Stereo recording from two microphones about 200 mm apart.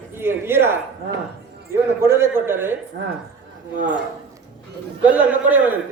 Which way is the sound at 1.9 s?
10° right (ahead or behind).